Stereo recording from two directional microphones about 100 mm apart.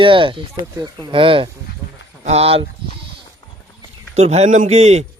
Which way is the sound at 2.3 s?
75° right (ahead or behind).